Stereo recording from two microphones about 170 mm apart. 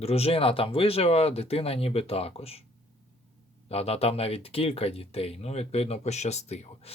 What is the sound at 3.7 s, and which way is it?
Speech, 35° left (ahead or behind).